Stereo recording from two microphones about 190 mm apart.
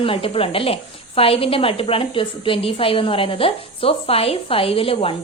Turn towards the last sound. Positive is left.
turn(degrees=30)  # may be behind; listen again after turning